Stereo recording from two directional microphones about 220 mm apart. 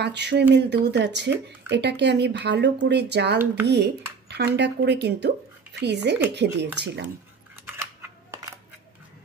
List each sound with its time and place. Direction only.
0.0 s speech: 50° right (ahead or behind)
7.7 s scissors: 10° right (ahead or behind)